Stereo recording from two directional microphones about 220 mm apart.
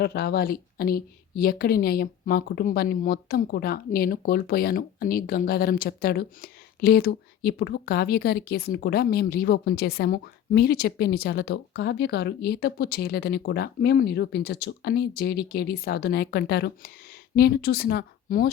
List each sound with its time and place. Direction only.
0.0 s a woman's voice: 45° left (ahead or behind)